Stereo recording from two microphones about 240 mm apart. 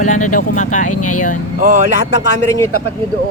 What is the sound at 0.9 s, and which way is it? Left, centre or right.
Speech, left.